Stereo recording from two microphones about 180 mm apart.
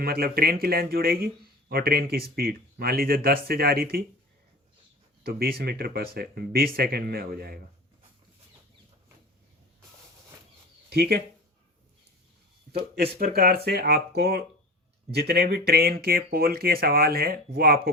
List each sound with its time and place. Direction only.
0.0 s speech: 55° right (ahead or behind)
5.2 s speech: 55° right (ahead or behind)
10.8 s speech: 65° right (ahead or behind)
13.1 s speech: 55° right (ahead or behind)